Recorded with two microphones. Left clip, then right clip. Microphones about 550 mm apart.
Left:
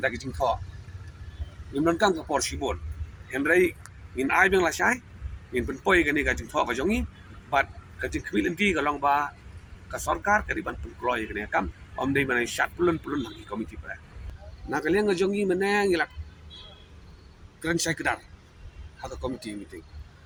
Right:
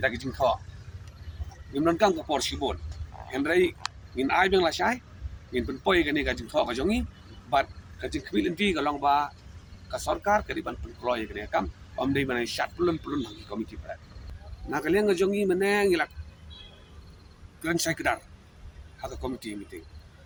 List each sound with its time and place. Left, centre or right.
0.0 s speech: right
1.7 s speech: right
14.7 s speech: right
17.6 s speech: right